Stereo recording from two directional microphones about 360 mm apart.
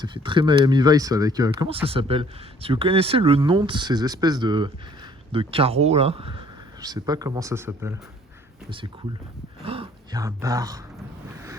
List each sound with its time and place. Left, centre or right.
0.0 s speech: centre
9.6 s speech: centre